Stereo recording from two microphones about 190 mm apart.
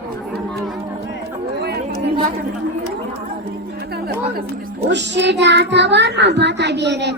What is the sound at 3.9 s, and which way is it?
Chatter, 55° right (ahead or behind).